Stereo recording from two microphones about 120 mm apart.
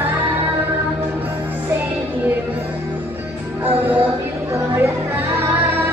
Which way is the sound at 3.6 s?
15° right (ahead or behind).